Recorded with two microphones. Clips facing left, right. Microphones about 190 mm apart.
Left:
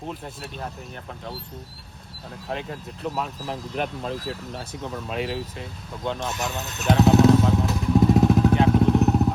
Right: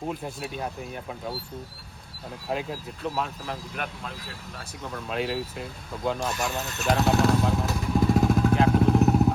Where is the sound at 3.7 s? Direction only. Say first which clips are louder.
Left 7 dB; 35° left (ahead or behind).